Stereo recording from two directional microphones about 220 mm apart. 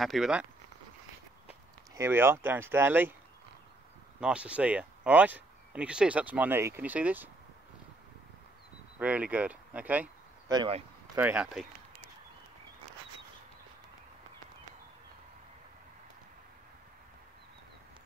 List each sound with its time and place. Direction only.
0.0 s speech: centre (ahead or behind)
1.5 s speech: 10° right (ahead or behind)
4.2 s speech: 5° right (ahead or behind)
9.0 s speech: 5° right (ahead or behind)
10.5 s speech: 20° right (ahead or behind)
11.1 s speech: 5° right (ahead or behind)